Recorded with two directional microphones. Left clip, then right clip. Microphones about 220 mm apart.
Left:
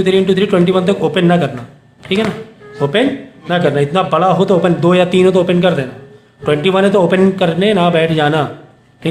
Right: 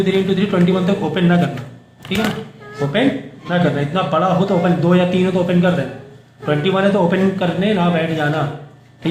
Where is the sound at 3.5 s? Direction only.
45° left (ahead or behind).